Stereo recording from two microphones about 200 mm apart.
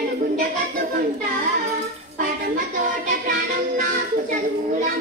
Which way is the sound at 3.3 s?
45° right (ahead or behind).